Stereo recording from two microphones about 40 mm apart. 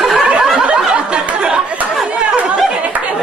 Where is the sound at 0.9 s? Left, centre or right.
Right.